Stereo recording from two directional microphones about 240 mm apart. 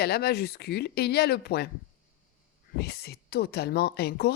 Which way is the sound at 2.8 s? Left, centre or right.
Left.